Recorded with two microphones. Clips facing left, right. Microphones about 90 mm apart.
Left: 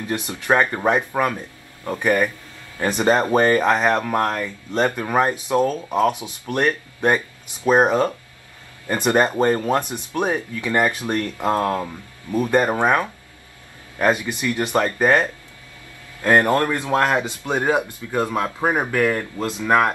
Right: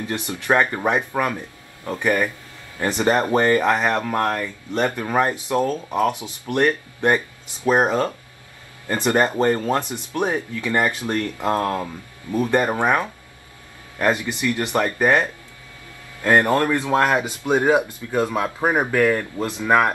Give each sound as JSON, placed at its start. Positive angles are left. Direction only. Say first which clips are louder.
{"t": 0.1, "sound": "speech", "louder": "left 1 dB", "side_deg": 15}
{"t": 16.9, "sound": "speech", "louder": "left 1 dB", "side_deg": -15}